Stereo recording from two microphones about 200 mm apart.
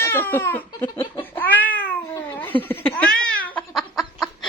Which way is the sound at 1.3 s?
10° left (ahead or behind).